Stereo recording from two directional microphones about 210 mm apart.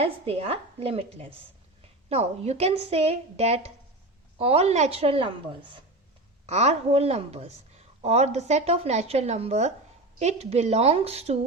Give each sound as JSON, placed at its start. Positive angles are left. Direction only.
{"t": 0.0, "sound": "speech", "side_deg": -30}
{"t": 6.4, "sound": "a woman's voice", "side_deg": -30}